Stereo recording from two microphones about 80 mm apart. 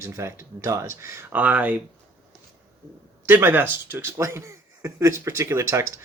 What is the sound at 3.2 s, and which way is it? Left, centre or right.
Speech, right.